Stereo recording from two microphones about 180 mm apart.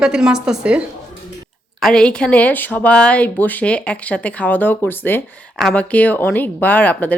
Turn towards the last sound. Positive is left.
turn(degrees=10)  # may be behind; listen again after turning